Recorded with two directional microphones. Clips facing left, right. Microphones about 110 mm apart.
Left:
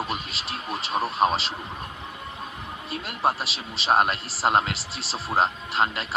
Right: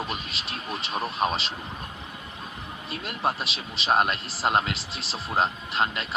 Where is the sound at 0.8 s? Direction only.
35° left (ahead or behind).